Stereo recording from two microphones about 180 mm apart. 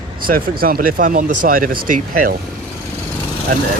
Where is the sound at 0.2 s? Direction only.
50° right (ahead or behind).